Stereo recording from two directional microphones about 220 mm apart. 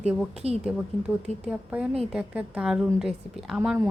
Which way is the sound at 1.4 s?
5° right (ahead or behind).